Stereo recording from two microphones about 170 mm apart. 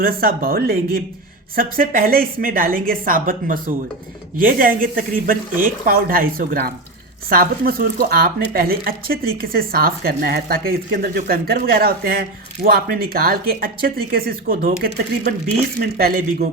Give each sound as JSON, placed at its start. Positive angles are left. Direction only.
{"t": 0.0, "sound": "speech", "side_deg": -60}